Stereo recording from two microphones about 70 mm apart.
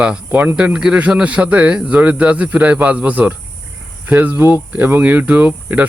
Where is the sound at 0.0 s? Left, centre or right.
Centre.